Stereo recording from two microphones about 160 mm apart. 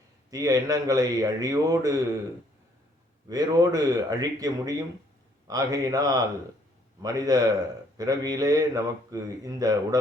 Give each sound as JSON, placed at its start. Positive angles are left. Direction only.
{"t": 0.3, "sound": "speech", "side_deg": -20}
{"t": 3.2, "sound": "speech", "side_deg": -25}